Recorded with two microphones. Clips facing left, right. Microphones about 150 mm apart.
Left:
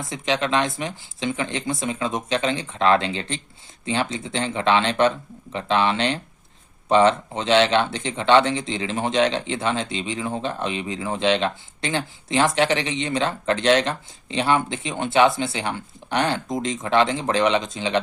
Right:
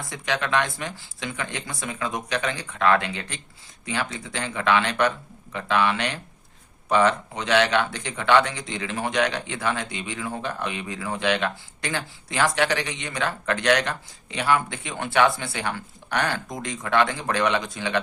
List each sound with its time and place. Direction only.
0.0 s speech: 20° left (ahead or behind)